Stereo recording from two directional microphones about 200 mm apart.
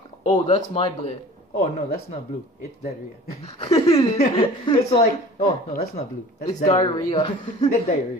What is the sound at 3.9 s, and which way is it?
Speech, 30° left (ahead or behind).